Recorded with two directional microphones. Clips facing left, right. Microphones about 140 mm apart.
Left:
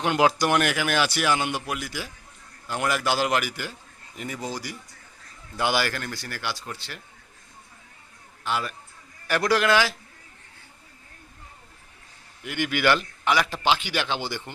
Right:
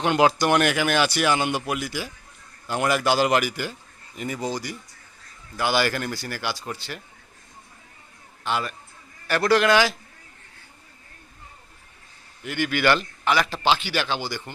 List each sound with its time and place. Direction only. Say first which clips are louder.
0.0 s speech: right 2 dB; centre (ahead or behind)
5.9 s speech: right 4 dB; 10° right (ahead or behind)
8.4 s speech: right 2 dB; centre (ahead or behind)
12.5 s a man's voice: right 1 dB; 15° left (ahead or behind)